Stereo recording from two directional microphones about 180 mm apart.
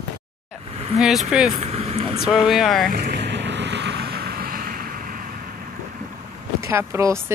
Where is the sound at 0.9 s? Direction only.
Centre (ahead or behind).